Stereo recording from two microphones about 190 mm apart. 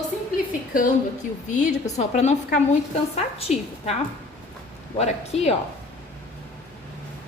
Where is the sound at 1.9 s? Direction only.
35° left (ahead or behind).